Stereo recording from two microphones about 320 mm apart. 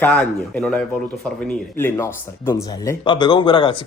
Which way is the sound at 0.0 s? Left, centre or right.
Centre.